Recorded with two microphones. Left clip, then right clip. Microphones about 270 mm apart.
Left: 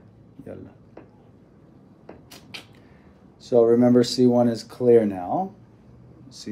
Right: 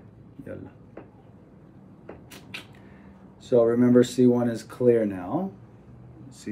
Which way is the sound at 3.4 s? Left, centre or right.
Left.